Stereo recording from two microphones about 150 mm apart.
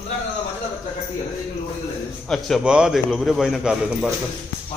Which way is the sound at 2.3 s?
Centre (ahead or behind).